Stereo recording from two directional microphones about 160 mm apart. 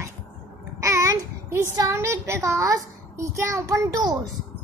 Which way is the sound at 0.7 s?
20° right (ahead or behind).